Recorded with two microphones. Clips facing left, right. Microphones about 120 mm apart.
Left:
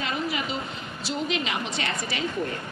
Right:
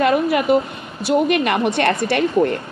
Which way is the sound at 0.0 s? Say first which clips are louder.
Right 13 dB; 55° right (ahead or behind).